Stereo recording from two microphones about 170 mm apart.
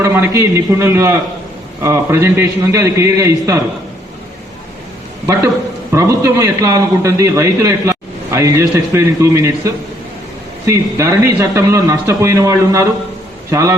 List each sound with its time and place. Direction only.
0.0 s a man's voice: 15° right (ahead or behind)
5.9 s a man's voice: 15° right (ahead or behind)